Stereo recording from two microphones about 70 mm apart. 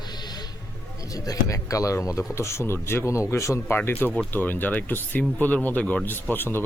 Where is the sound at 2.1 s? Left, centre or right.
Left.